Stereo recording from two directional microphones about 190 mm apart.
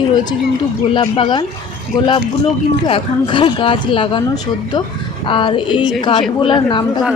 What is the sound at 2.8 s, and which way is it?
Speech, 25° left (ahead or behind).